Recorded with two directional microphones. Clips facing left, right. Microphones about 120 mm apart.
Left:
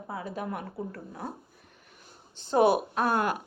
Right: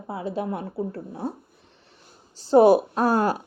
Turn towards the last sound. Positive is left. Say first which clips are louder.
# right 5 dB
turn(degrees=-35)  # may be behind; listen again after turning